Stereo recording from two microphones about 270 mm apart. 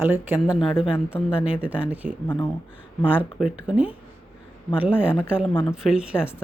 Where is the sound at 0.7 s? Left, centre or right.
Centre.